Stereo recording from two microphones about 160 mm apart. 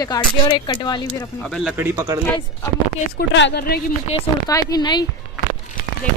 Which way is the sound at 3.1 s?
90° left.